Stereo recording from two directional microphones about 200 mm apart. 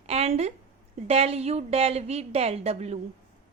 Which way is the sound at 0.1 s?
30° right (ahead or behind).